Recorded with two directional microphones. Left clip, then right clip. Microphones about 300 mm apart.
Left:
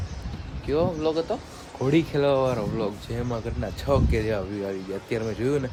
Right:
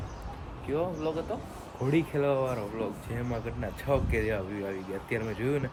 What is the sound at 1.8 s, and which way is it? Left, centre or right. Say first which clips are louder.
Speech: left 6 dB; left.